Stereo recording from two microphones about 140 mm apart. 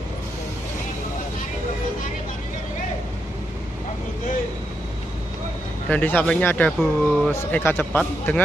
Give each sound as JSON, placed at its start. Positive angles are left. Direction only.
{"t": 5.9, "sound": "speech", "side_deg": 10}